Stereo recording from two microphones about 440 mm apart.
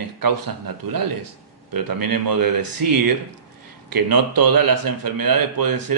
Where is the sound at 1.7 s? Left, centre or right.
Right.